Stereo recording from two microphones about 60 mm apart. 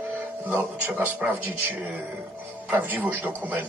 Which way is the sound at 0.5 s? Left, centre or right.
Right.